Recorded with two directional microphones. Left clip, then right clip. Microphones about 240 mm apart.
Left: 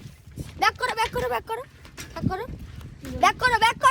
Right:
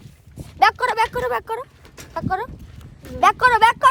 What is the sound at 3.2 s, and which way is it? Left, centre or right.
Speech, centre.